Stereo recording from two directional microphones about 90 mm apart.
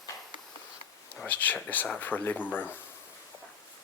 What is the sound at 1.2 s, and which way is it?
Speech, 20° left (ahead or behind).